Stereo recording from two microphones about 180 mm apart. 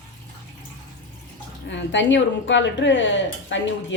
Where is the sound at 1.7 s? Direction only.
90° left.